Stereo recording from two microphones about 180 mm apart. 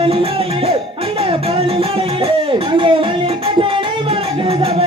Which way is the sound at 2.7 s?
30° right (ahead or behind).